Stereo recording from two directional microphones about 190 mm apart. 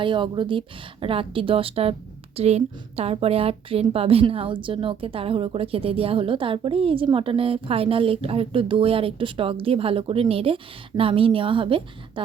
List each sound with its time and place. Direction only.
0.0 s a woman's voice: 25° right (ahead or behind)